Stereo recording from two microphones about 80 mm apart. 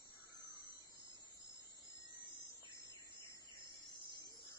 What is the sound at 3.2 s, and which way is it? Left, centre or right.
Cricket, left.